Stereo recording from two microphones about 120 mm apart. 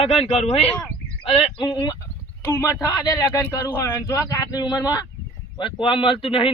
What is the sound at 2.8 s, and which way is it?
Speech, 35° left (ahead or behind).